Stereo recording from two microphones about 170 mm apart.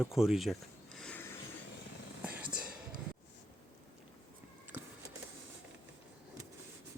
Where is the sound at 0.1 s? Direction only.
Centre (ahead or behind).